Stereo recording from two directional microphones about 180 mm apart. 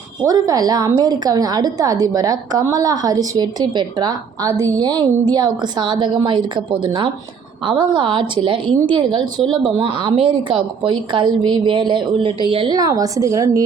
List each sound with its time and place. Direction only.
0.3 s a woman's voice: 20° right (ahead or behind)